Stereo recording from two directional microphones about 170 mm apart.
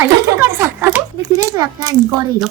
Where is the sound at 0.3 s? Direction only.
15° right (ahead or behind).